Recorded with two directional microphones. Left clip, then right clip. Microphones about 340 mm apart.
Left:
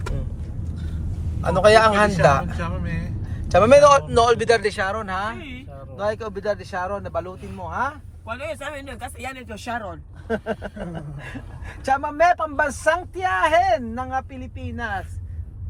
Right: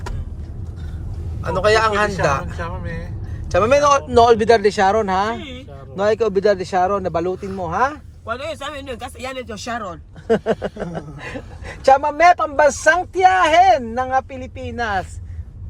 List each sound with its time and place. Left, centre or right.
1.4 s a man's voice: centre; by 7.9 s right
9.8 s speech: right